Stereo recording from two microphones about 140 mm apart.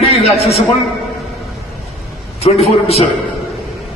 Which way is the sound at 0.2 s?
50° left (ahead or behind).